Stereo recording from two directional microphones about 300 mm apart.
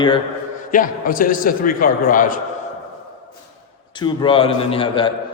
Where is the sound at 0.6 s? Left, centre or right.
Left.